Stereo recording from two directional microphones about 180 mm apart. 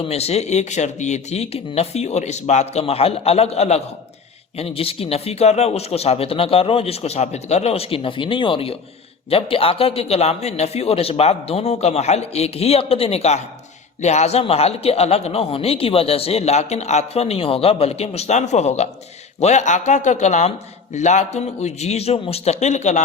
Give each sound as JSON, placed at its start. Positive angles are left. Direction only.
{"t": 0.0, "sound": "speech", "side_deg": 35}